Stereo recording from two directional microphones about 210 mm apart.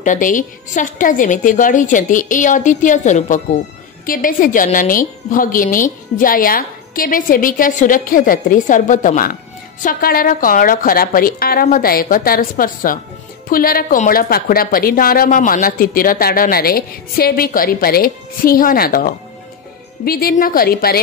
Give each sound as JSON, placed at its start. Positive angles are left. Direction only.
{"t": 0.0, "sound": "a woman's voice", "side_deg": 40}